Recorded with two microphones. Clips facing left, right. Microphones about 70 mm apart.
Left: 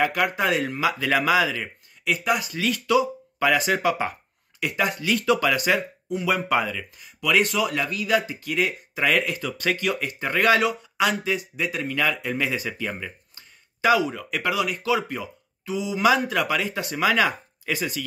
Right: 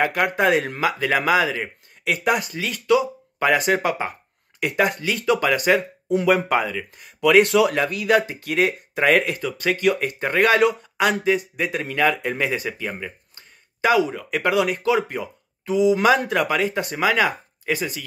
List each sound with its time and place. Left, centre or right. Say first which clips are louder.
0.0 s speech: right 3 dB; right
2.0 s a man's voice: right 2 dB; right
2.7 s speech: right 3 dB; right
5.8 s speech: right 6 dB; right
6.5 s speech: right 2 dB; right
7.2 s a man's voice: right 7 dB; right
12.6 s speech: right 1 dB; right
13.7 s speech: right 2 dB; right
14.4 s a man's voice: right 6 dB; right